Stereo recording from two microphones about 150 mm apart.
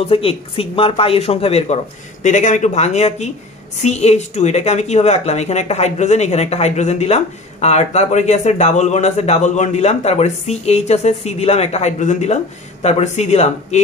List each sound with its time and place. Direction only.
0.0 s speech: 40° left (ahead or behind)
2.2 s speech: 55° left (ahead or behind)